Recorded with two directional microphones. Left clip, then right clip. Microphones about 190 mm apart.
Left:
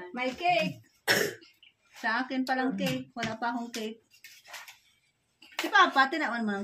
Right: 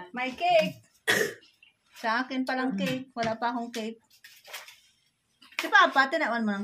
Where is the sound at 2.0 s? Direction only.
35° right (ahead or behind).